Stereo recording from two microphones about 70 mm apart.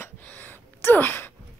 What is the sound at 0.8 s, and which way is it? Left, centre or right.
Wail, left.